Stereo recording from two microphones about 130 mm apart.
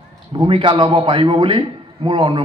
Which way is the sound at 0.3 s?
40° right (ahead or behind).